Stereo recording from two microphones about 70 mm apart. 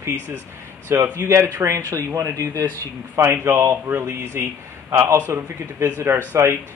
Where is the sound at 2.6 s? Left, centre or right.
Right.